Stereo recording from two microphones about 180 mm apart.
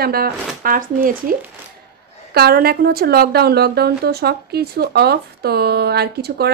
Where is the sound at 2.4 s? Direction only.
60° right (ahead or behind).